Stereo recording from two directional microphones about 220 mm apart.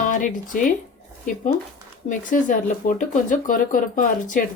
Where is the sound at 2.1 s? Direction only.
40° left (ahead or behind).